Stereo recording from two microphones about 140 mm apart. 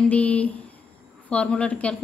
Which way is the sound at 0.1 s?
10° left (ahead or behind).